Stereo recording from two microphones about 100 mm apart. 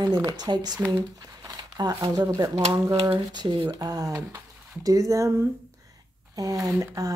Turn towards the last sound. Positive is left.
turn(degrees=-35)  # may be behind; listen again after turning